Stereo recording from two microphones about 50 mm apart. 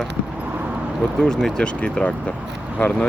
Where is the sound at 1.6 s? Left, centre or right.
Centre.